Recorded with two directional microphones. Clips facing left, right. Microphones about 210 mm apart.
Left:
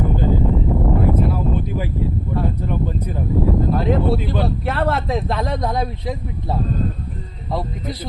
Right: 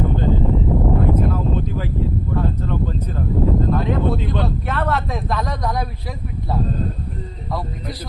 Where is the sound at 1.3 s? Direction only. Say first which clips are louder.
Even; 10° left (ahead or behind).